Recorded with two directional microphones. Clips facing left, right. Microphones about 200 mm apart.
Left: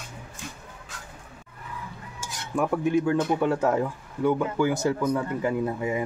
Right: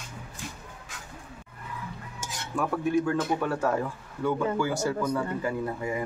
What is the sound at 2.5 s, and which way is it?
A man's voice, 20° left (ahead or behind).